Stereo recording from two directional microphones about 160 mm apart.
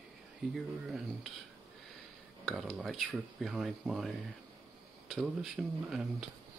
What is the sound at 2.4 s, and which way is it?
Speech, centre (ahead or behind).